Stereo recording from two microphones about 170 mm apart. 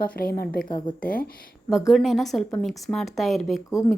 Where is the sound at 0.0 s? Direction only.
60° left (ahead or behind).